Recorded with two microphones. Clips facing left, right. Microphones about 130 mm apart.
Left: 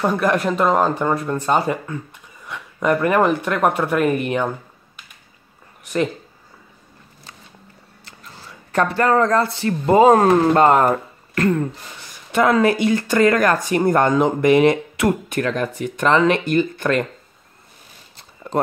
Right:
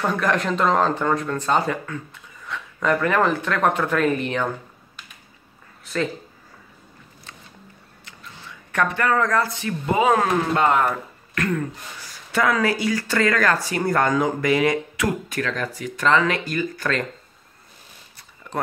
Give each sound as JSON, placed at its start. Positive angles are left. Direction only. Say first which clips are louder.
{"t": 0.0, "sound": "speech", "louder": "left 4 dB", "side_deg": 15}
{"t": 8.0, "sound": "speech", "louder": "left 1 dB", "side_deg": 35}